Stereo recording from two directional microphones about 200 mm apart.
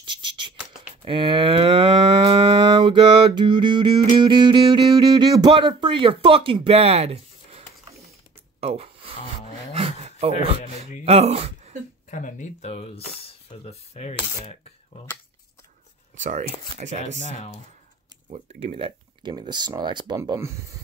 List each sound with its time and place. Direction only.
0.0 s a sound: 25° right (ahead or behind)
1.0 s moo: 25° right (ahead or behind)
8.5 s a sound: 30° right (ahead or behind)
11.1 s speech: 30° right (ahead or behind)
12.1 s speech: 40° left (ahead or behind)
16.2 s speech: 35° right (ahead or behind)
18.3 s speech: 35° right (ahead or behind); by 20.5 s 15° right (ahead or behind)